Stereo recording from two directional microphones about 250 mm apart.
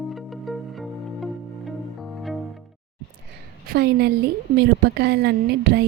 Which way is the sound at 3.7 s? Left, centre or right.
Right.